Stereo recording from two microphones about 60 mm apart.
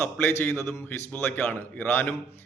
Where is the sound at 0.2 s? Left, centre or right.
Left.